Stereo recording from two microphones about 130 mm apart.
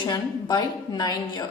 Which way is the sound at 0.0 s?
35° left (ahead or behind).